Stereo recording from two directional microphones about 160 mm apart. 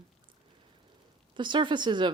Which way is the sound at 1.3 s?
30° right (ahead or behind).